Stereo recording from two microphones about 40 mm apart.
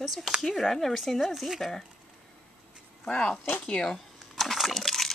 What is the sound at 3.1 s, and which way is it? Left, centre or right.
Speech, left.